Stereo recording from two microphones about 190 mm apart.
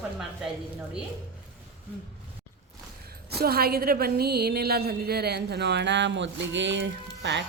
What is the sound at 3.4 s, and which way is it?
A woman's voice, 55° right (ahead or behind).